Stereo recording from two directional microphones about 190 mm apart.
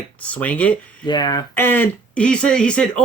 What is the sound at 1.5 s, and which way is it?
Speech, 10° left (ahead or behind).